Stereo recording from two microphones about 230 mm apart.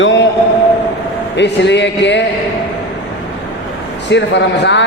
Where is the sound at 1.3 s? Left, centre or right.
Left.